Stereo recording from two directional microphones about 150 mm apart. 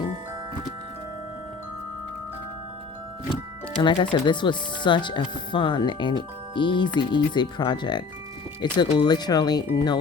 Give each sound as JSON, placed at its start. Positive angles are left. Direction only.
{"t": 3.8, "sound": "speech", "side_deg": 30}